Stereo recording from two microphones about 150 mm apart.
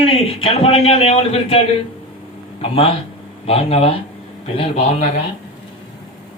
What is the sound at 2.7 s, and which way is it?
A man's voice, 35° left (ahead or behind).